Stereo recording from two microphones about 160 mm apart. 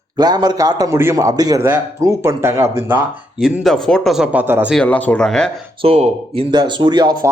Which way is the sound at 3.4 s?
Centre (ahead or behind).